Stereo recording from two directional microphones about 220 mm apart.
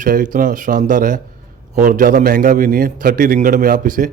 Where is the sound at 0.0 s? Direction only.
35° right (ahead or behind).